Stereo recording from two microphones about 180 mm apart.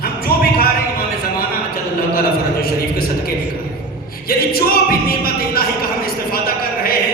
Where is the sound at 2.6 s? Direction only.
55° left (ahead or behind).